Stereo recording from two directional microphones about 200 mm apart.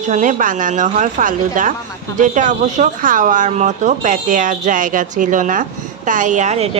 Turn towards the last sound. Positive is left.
turn(degrees=-35)  # may be behind; listen again after turning